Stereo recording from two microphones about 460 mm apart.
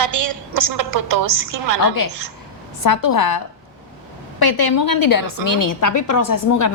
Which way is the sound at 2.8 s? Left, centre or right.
Left.